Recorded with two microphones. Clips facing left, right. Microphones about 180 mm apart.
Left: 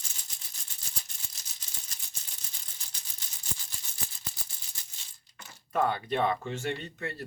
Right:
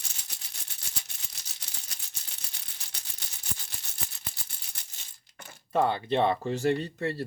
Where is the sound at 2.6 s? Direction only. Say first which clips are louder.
Right 3 dB; 70° right (ahead or behind).